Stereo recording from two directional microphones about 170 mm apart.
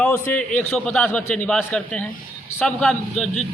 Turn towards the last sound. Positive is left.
turn(degrees=5)  # may be behind; listen again after turning